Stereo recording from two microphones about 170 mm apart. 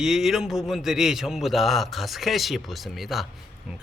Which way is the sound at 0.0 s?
5° right (ahead or behind).